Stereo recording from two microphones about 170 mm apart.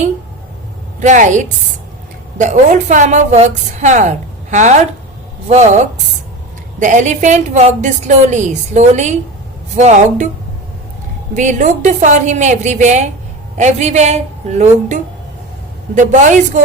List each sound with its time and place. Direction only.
0.9 s a woman's voice: 45° right (ahead or behind)
11.3 s a woman's voice: 45° right (ahead or behind)